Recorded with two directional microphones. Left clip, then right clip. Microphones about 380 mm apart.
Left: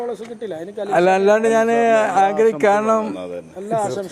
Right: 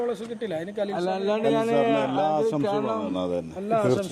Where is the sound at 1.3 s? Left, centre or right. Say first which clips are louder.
Left 7 dB; left.